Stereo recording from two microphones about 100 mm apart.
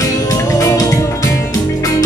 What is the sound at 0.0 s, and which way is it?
Music, 35° left (ahead or behind).